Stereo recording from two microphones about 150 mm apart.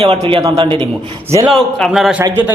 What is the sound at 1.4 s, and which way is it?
Speech, centre (ahead or behind).